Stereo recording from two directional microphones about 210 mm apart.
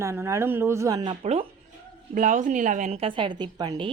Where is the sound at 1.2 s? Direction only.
30° right (ahead or behind).